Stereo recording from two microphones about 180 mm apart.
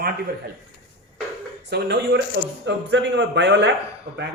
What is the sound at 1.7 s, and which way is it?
Speech, 65° right (ahead or behind).